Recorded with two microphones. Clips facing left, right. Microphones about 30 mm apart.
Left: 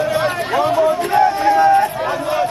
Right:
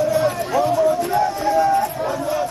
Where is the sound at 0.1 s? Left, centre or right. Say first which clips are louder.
Left 1 dB; left.